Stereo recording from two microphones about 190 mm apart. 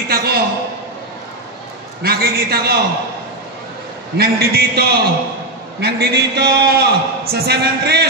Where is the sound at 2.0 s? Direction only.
55° right (ahead or behind).